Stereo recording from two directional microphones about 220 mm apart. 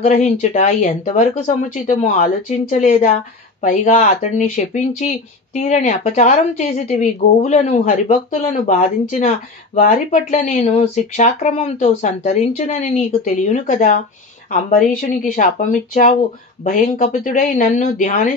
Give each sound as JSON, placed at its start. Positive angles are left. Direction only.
{"t": 0.0, "sound": "speech", "side_deg": 30}